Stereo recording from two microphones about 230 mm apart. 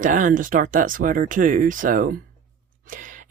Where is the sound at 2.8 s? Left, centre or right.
Right.